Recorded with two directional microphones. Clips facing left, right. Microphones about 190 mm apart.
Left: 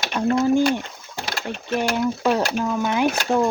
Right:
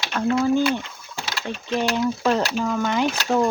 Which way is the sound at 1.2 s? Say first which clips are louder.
Left 2 dB; 55° left (ahead or behind).